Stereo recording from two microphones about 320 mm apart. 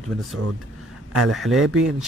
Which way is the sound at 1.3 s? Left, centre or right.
Centre.